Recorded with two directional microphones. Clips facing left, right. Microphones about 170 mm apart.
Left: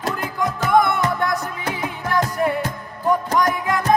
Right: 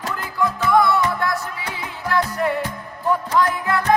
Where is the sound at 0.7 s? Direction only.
20° left (ahead or behind).